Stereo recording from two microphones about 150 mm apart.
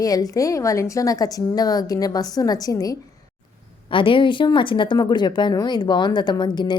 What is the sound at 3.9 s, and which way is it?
A woman's voice, 35° left (ahead or behind).